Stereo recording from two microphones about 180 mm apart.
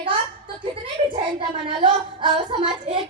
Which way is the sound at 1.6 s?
25° right (ahead or behind).